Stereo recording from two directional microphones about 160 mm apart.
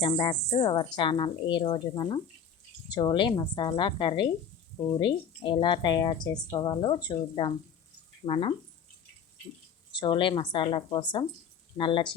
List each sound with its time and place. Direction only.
0.0 s speech: 30° left (ahead or behind)
10.0 s speech: 30° left (ahead or behind)